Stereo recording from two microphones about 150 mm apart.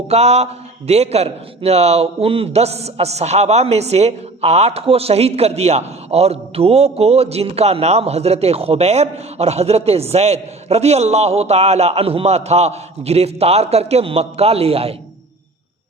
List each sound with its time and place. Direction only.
0.1 s a man's voice: 45° right (ahead or behind)